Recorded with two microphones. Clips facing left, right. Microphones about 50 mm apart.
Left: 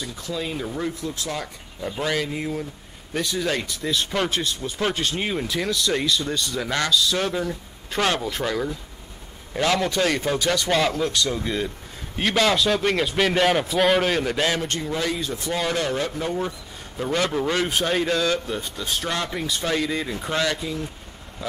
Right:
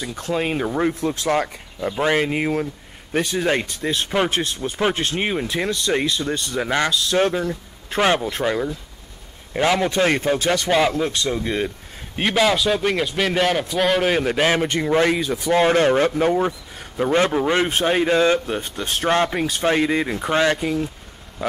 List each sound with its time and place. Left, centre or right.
0.1 s speech: right
1.8 s speech: right
2.2 s speech: right
2.6 s speech: right
10.7 s speech: centre
12.2 s a man's voice: centre
14.0 s a man's voice: centre
14.4 s speech: right
14.8 s speech: right
15.2 s speech: centre
15.5 s speech: right
16.3 s speech: right
21.4 s speech: right